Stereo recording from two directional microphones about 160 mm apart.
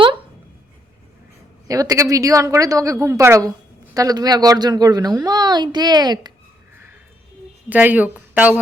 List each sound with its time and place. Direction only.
1.6 s a woman's voice: 20° right (ahead or behind)
7.7 s a woman's voice: 10° right (ahead or behind)